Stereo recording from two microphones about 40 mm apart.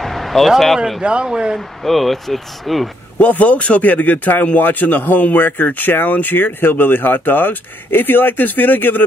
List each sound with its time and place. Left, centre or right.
0.0 s a sound: centre
1.0 s speech: right
1.8 s speech: centre
3.2 s speech: left